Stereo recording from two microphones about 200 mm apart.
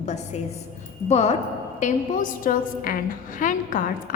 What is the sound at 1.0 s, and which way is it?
A woman's voice, 30° left (ahead or behind).